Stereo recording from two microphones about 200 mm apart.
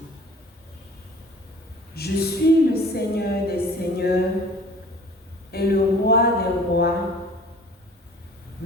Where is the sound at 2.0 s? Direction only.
50° left (ahead or behind).